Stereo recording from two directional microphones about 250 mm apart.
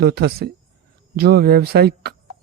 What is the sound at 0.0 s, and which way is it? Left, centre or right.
Speech, right.